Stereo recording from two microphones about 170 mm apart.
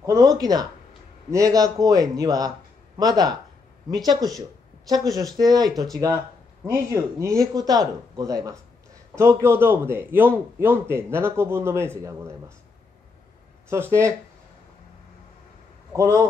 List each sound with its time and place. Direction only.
0.0 s a man's voice: 20° right (ahead or behind)
13.7 s a man's voice: 15° right (ahead or behind)
15.9 s a man's voice: 20° right (ahead or behind)